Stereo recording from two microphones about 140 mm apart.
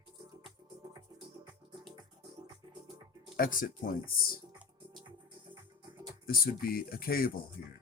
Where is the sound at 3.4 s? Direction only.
85° left.